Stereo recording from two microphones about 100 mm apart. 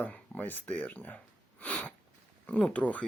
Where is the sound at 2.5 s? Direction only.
15° left (ahead or behind).